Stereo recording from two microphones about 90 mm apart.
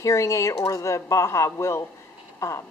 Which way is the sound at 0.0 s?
35° left (ahead or behind).